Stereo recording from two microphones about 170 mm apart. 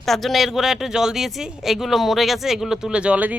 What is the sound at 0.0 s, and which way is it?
Speech, centre (ahead or behind).